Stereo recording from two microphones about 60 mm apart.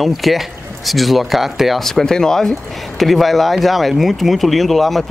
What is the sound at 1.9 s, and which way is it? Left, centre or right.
Speech, centre.